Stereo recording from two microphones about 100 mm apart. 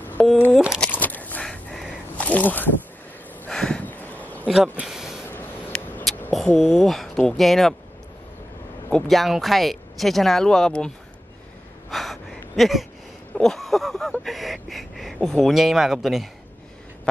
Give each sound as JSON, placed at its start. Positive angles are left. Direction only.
{"t": 0.5, "sound": "crumpling", "side_deg": -5}
{"t": 0.7, "sound": "a sound", "side_deg": 15}
{"t": 4.8, "sound": "a sound", "side_deg": -5}
{"t": 5.7, "sound": "vehicle", "side_deg": 5}
{"t": 6.3, "sound": "speech", "side_deg": 0}
{"t": 9.1, "sound": "speech", "side_deg": 0}
{"t": 11.9, "sound": "gasp", "side_deg": 0}
{"t": 13.3, "sound": "a sound", "side_deg": 5}
{"t": 15.1, "sound": "speech", "side_deg": 5}